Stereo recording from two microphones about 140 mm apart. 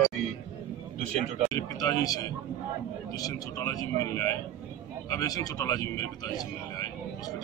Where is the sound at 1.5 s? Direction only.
25° left (ahead or behind).